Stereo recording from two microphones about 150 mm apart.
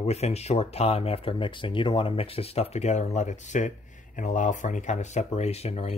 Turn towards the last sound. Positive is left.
turn(degrees=45)  # may be behind; listen again after turning